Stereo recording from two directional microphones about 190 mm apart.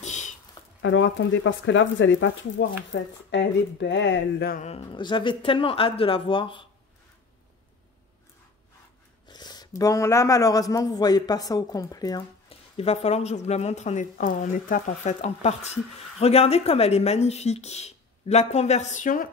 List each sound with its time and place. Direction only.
0.0 s a sound: 40° left (ahead or behind)
0.8 s speech: 75° left (ahead or behind)
4.6 s speech: 35° left (ahead or behind)
9.3 s speech: 20° left (ahead or behind); by 19.2 s 45° left (ahead or behind)